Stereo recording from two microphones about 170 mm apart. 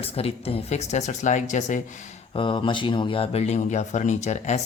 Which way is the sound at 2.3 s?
30° left (ahead or behind).